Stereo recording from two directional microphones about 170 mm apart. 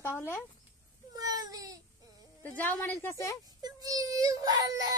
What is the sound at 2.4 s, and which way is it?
Speech, 10° left (ahead or behind).